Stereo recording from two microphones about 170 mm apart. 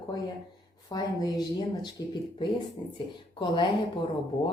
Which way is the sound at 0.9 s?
25° left (ahead or behind).